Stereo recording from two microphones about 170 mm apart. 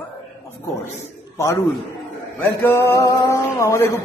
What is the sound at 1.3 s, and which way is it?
A man's voice, 15° left (ahead or behind).